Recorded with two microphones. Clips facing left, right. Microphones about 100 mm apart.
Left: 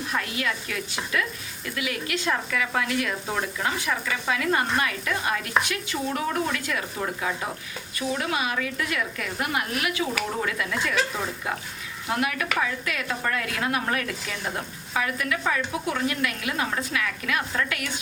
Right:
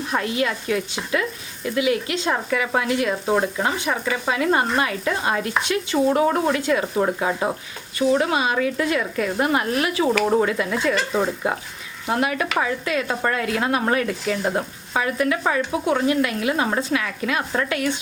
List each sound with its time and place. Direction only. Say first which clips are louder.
0.1 s a woman's voice: right 7 dB; 30° right (ahead or behind)